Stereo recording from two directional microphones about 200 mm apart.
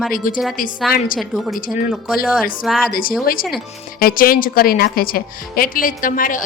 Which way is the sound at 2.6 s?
Centre (ahead or behind).